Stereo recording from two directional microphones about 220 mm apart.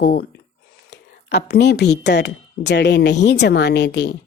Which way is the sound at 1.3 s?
50° left (ahead or behind).